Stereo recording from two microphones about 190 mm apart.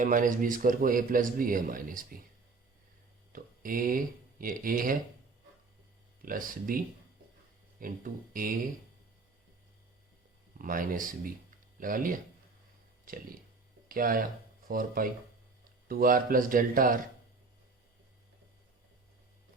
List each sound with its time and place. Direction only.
0.0 s speech: 45° right (ahead or behind)
3.3 s speech: 45° right (ahead or behind)
6.2 s speech: 45° right (ahead or behind)
7.8 s speech: 45° right (ahead or behind)
10.6 s speech: 45° right (ahead or behind)